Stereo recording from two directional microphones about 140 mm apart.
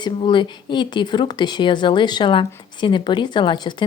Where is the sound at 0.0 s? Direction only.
35° left (ahead or behind).